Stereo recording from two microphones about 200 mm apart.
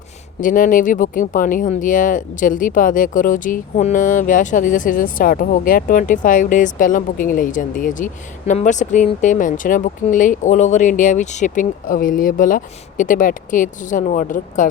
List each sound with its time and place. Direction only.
0.3 s speech: 40° left (ahead or behind)